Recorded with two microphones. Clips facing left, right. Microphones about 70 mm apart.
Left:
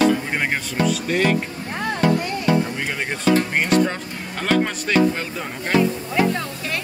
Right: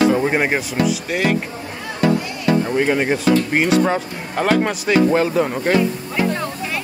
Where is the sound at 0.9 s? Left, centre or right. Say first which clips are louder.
Even; centre.